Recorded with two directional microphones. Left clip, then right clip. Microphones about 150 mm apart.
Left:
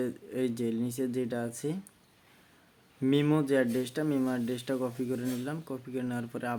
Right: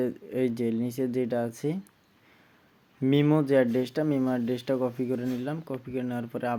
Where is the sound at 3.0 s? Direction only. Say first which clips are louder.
Right 3 dB; 10° right (ahead or behind).